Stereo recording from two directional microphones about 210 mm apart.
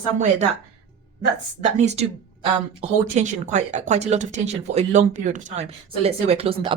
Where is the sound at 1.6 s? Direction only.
35° right (ahead or behind).